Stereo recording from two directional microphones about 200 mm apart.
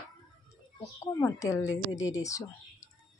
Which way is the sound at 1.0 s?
15° left (ahead or behind).